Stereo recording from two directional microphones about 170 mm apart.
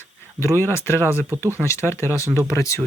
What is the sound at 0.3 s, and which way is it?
Speech, 15° left (ahead or behind).